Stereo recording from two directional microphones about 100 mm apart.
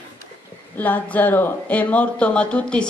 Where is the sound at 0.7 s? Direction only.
15° left (ahead or behind).